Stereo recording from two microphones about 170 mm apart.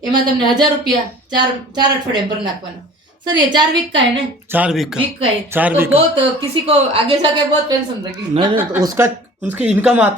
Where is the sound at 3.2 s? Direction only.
25° right (ahead or behind).